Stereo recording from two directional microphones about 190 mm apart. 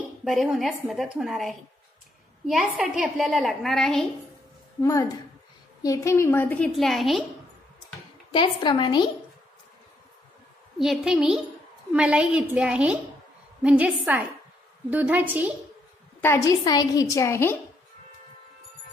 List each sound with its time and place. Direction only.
0.2 s a woman's voice: centre (ahead or behind)
4.8 s a woman's voice: 15° left (ahead or behind); by 7.2 s centre (ahead or behind)
8.3 s a woman's voice: 25° left (ahead or behind)
10.8 s a woman's voice: centre (ahead or behind)
16.2 s a woman's voice: 15° left (ahead or behind)